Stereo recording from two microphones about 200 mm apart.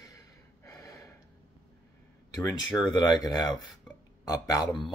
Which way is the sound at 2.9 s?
20° left (ahead or behind).